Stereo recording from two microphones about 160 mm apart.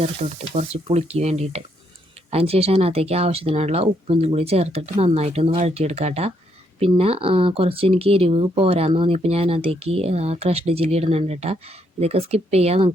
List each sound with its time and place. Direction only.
0.2 s speech: 40° right (ahead or behind)